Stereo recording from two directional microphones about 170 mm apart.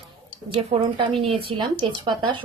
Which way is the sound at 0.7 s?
35° right (ahead or behind).